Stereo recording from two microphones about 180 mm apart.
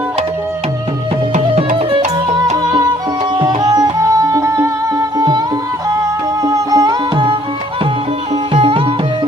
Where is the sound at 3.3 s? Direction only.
20° right (ahead or behind).